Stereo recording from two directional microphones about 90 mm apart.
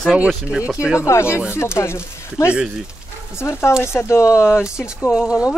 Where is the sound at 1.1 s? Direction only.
30° left (ahead or behind).